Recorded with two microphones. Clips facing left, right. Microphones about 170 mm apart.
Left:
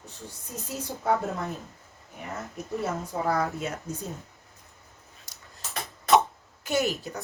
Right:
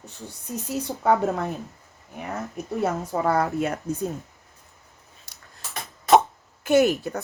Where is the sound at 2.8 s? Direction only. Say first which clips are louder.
Right 5 dB; 65° right (ahead or behind).